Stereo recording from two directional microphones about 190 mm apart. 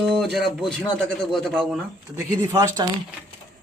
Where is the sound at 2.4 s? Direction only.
20° right (ahead or behind).